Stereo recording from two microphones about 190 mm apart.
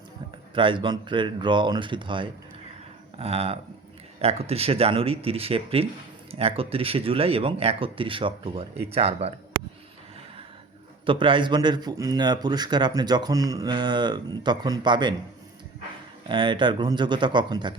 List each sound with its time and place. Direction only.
0.5 s speech: 25° right (ahead or behind)
11.0 s speech: 25° right (ahead or behind)
16.3 s speech: 25° right (ahead or behind)